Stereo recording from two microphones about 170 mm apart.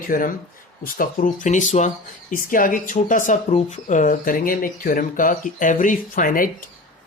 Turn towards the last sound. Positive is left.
turn(degrees=55)  # may be behind; listen again after turning